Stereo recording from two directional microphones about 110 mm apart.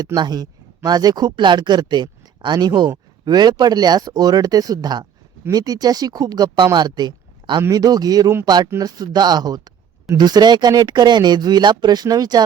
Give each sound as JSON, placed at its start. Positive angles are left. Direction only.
{"t": 0.0, "sound": "speech", "side_deg": -40}